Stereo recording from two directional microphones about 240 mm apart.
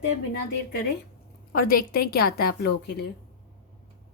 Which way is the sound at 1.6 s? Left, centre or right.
Left.